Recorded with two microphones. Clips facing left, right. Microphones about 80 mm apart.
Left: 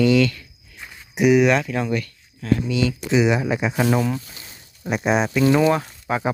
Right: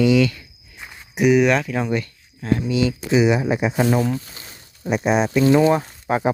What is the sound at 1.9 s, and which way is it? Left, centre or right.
Speech, right.